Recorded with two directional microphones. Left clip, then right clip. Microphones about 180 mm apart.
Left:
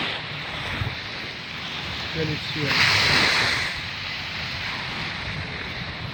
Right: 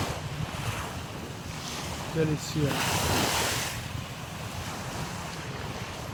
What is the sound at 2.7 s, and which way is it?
Speech, 75° right (ahead or behind).